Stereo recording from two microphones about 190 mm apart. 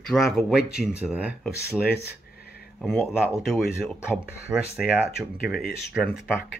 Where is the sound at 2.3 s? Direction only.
55° left (ahead or behind).